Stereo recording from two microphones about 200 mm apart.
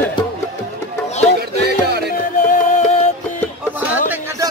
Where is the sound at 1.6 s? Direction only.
55° right (ahead or behind).